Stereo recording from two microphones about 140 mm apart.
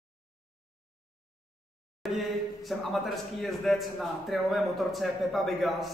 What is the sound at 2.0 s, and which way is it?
A man's voice, centre (ahead or behind).